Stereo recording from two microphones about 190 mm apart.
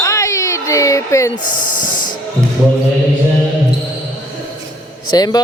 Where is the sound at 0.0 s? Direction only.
15° left (ahead or behind).